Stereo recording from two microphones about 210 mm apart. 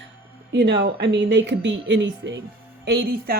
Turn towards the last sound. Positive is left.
turn(degrees=-50)  # may be behind; listen again after turning